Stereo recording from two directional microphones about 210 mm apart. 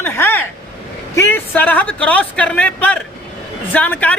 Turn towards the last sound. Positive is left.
turn(degrees=5)  # may be behind; listen again after turning